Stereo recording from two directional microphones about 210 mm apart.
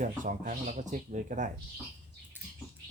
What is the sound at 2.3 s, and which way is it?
Bird, 10° right (ahead or behind).